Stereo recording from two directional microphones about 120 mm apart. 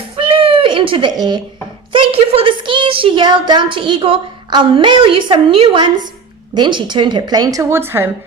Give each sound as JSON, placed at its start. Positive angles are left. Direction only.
{"t": 0.2, "sound": "a sound", "side_deg": -50}
{"t": 1.1, "sound": "a woman's voice", "side_deg": -35}
{"t": 1.9, "sound": "a woman's voice", "side_deg": -50}